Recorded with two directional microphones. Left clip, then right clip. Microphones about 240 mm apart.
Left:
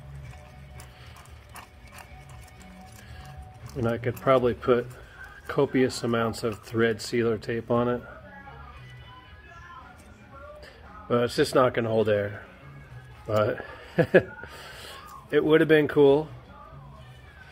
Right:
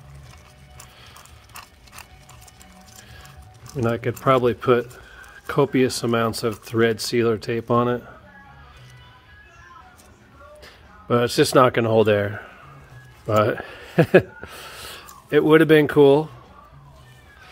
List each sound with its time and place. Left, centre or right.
3.7 s speech: right
10.6 s speech: right